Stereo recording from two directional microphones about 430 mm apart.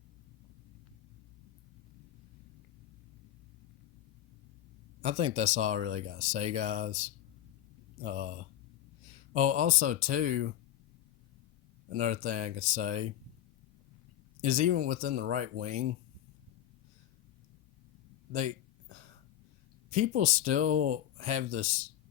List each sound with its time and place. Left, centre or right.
5.0 s speech: centre
11.9 s speech: centre
14.4 s speech: centre
19.9 s speech: centre